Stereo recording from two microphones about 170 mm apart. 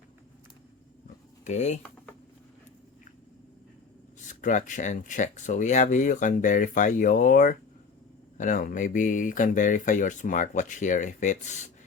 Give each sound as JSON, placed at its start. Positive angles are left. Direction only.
{"t": 1.5, "sound": "speech", "side_deg": 40}
{"t": 4.4, "sound": "speech", "side_deg": 50}